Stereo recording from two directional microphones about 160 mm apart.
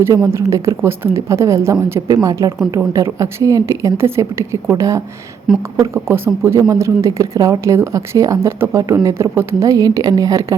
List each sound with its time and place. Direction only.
0.0 s a woman's voice: 15° right (ahead or behind)